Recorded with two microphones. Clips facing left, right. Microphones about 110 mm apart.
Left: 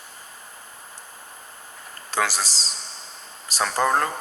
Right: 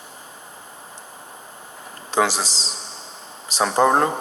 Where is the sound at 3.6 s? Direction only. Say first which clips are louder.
Right 5 dB; 25° right (ahead or behind).